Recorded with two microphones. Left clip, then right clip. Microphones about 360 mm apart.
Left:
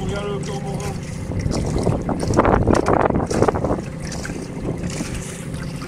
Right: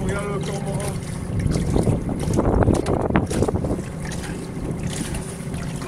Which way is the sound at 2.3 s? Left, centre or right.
Left.